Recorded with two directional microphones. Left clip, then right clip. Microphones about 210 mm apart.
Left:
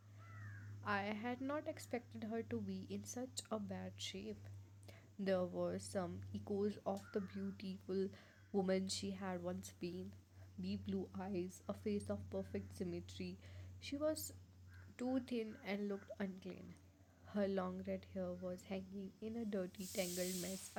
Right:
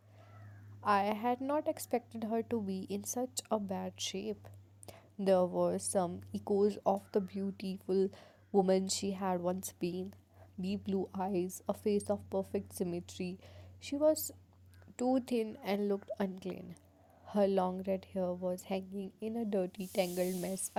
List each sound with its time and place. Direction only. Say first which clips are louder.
0.8 s a woman's voice: right 11 dB; 30° right (ahead or behind)